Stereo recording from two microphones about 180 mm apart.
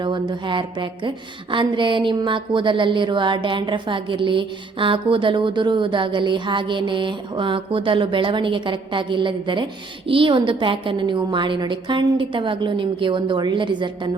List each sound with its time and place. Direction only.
0.0 s a woman's voice: 25° right (ahead or behind)